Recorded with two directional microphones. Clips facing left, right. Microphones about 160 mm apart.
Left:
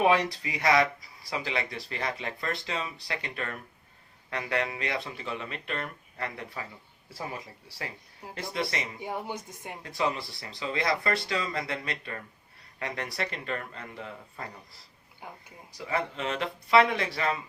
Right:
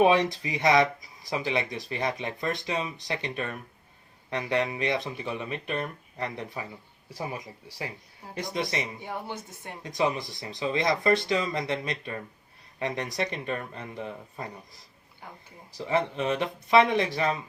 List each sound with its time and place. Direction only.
0.0 s speech: 20° right (ahead or behind)
9.0 s a woman's voice: 15° left (ahead or behind)
9.8 s speech: 20° right (ahead or behind)
15.9 s speech: 20° right (ahead or behind)